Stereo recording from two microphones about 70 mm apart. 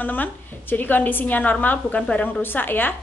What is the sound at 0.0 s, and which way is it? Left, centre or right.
A woman's voice, left.